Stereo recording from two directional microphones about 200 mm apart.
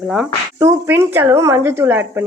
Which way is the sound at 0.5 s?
15° right (ahead or behind).